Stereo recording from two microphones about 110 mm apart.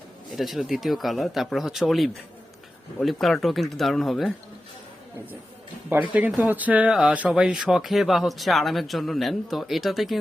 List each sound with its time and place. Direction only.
0.3 s speech: centre (ahead or behind)
5.9 s speech: 15° right (ahead or behind)